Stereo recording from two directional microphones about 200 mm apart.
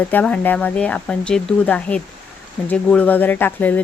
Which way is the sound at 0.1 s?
10° left (ahead or behind).